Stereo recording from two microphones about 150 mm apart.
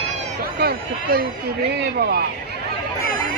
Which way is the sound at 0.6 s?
90° right.